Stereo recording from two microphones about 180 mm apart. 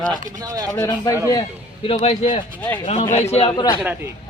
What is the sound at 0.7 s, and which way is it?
Speech, 15° left (ahead or behind).